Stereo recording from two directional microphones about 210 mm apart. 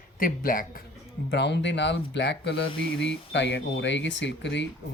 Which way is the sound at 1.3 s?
55° left (ahead or behind).